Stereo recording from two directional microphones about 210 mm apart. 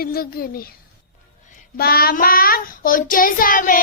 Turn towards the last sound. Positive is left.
turn(degrees=40)  # may be behind; listen again after turning